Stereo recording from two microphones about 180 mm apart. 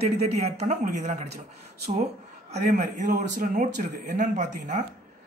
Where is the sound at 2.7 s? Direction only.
50° right (ahead or behind).